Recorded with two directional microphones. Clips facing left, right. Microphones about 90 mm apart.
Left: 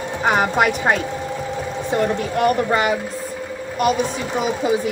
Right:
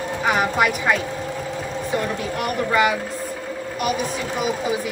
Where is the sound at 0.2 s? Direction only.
35° left (ahead or behind).